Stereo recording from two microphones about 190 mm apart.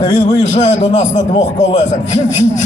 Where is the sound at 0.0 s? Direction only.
40° left (ahead or behind).